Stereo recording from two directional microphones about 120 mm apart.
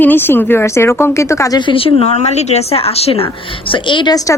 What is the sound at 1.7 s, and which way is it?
A woman's voice, 50° left (ahead or behind).